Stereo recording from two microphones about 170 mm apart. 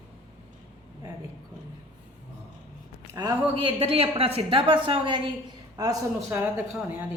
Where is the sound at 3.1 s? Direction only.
25° right (ahead or behind).